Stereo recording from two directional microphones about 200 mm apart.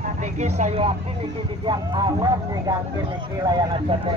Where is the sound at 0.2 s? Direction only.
35° right (ahead or behind).